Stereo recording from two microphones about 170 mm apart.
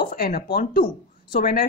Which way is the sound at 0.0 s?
60° left (ahead or behind).